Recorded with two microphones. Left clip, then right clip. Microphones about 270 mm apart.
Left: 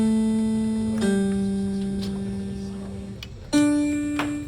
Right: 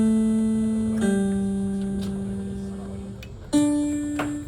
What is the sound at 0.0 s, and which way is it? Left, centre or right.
Music, left.